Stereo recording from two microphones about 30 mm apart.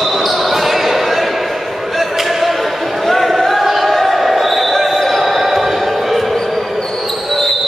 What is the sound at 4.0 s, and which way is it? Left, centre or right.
Basketball bounce, centre.